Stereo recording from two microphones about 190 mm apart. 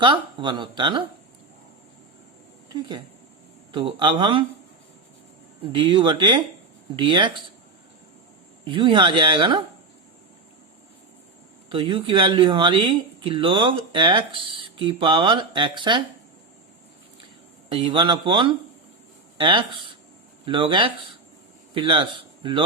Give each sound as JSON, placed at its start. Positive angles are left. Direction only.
{"t": 0.0, "sound": "speech", "side_deg": -25}
{"t": 2.6, "sound": "speech", "side_deg": -20}
{"t": 5.7, "sound": "speech", "side_deg": -25}
{"t": 8.6, "sound": "speech", "side_deg": -25}
{"t": 11.7, "sound": "speech", "side_deg": -30}
{"t": 17.7, "sound": "a man's voice", "side_deg": -25}